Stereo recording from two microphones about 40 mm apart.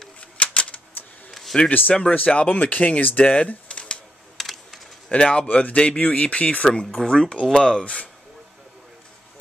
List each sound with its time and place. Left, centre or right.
0.2 s typewriter: left
1.3 s a sound: centre
1.7 s speech: left
2.1 s speech: left
4.4 s computer keyboard: centre
5.2 s speech: left
5.5 s speech: left
7.1 s speech: centre
7.8 s speech: left